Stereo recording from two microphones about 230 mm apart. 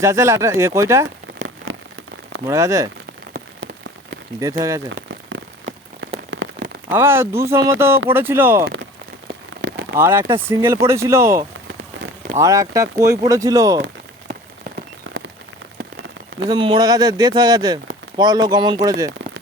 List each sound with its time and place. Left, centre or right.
0.0 s speech: centre
2.5 s speech: centre
3.3 s rain on surface: right
4.4 s speech: centre
6.3 s rain on surface: right
6.9 s speech: centre
9.6 s rain on surface: right
10.0 s speech: centre
13.7 s rain on surface: right
16.5 s speech: right